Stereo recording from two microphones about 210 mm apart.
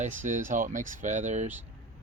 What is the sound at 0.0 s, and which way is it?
Speech, 35° right (ahead or behind).